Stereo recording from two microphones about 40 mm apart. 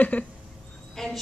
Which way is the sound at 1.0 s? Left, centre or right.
Centre.